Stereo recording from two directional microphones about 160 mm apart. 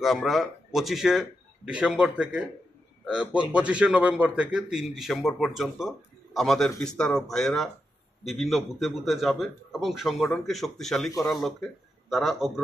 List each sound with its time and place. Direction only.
0.0 s a man's voice: centre (ahead or behind)
12.1 s a man's voice: centre (ahead or behind)